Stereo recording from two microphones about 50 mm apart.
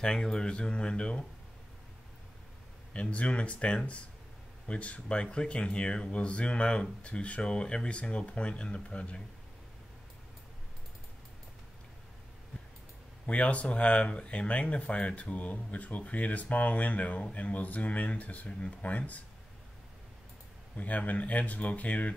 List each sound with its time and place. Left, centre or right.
0.0 s speech: centre
2.9 s speech: left
13.3 s speech: left
20.7 s speech: left